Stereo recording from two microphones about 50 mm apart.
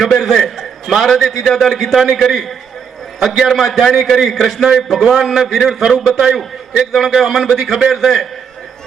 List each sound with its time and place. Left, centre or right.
0.0 s a man's voice: centre
6.9 s a man's voice: centre